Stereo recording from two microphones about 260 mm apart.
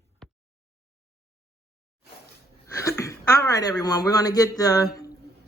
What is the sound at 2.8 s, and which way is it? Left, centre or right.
Speech, centre.